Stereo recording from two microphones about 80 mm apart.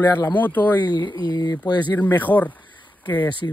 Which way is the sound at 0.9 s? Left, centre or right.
Left.